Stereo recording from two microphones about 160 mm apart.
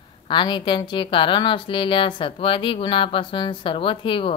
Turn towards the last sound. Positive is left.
turn(degrees=30)  # may be behind; listen again after turning